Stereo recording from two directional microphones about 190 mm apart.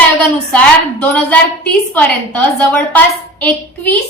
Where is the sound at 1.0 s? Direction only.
5° left (ahead or behind).